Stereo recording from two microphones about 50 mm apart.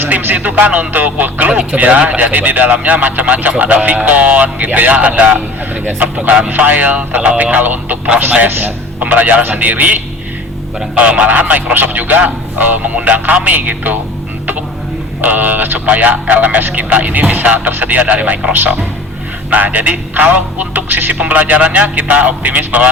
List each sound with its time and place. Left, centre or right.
0.3 s speech: right
9.0 s speech: right
15.2 s speech: right